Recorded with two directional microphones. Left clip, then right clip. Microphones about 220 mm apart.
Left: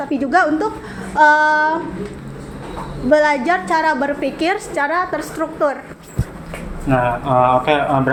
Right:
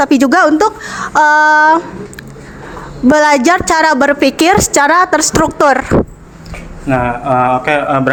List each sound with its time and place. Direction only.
0.0 s a woman's voice: 55° right (ahead or behind)
3.1 s a woman's voice: 55° right (ahead or behind)
6.8 s speech: 35° right (ahead or behind)